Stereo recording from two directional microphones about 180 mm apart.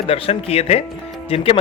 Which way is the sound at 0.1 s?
35° left (ahead or behind).